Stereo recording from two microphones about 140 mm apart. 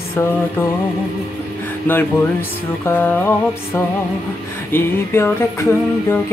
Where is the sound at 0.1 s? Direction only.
20° left (ahead or behind).